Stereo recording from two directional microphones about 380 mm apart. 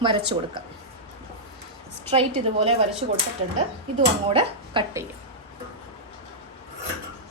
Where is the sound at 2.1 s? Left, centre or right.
Centre.